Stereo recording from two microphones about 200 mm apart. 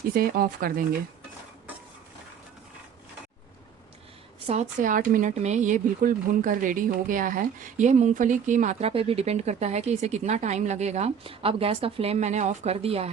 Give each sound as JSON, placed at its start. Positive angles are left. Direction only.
{"t": 0.1, "sound": "speech", "side_deg": -45}
{"t": 4.4, "sound": "speech", "side_deg": -35}